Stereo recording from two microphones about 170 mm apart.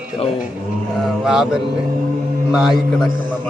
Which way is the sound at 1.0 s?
Centre (ahead or behind).